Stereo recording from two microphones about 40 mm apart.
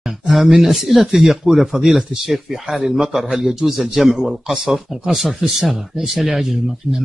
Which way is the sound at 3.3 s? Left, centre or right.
Right.